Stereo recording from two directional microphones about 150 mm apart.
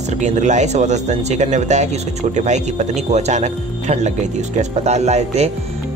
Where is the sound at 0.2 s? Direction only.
50° right (ahead or behind).